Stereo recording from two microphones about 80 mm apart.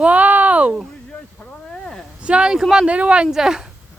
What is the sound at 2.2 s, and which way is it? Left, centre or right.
Speech, centre.